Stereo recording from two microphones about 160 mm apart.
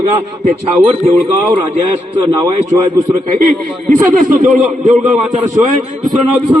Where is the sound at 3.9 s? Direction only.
55° right (ahead or behind).